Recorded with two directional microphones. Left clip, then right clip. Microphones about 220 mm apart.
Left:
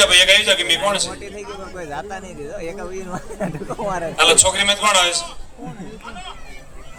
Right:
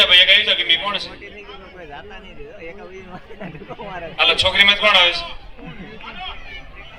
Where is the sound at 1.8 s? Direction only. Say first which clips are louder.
Left 9 dB; 55° left (ahead or behind).